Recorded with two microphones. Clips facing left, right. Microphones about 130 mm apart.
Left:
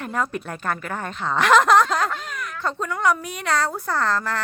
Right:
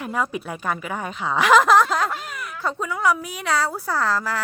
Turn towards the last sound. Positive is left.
turn(degrees=-5)  # may be behind; listen again after turning